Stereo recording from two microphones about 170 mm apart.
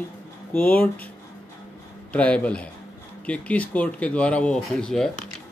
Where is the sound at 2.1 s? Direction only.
10° left (ahead or behind).